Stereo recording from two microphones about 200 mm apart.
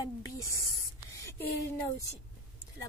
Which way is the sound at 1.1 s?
15° left (ahead or behind).